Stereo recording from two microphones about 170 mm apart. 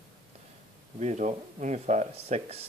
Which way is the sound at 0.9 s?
45° right (ahead or behind).